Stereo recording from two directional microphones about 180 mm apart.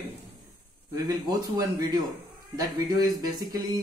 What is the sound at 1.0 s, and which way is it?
Speech, 20° right (ahead or behind).